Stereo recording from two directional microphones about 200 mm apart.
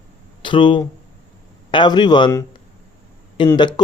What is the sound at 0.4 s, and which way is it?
Speech, 25° left (ahead or behind).